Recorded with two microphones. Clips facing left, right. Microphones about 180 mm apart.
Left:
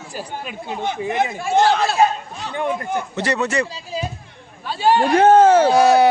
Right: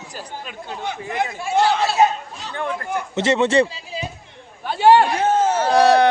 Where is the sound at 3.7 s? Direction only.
40° left (ahead or behind).